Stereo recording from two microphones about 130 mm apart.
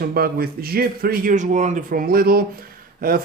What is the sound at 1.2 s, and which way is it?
Speech, 75° right (ahead or behind).